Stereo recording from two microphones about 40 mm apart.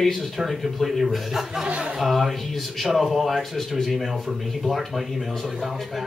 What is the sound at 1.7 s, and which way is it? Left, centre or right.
Speech, right.